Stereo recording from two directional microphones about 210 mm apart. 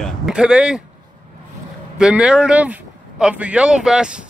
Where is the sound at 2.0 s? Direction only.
5° right (ahead or behind).